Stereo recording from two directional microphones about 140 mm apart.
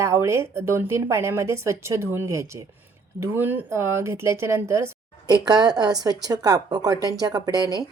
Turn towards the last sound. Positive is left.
turn(degrees=-30)  # may be behind; listen again after turning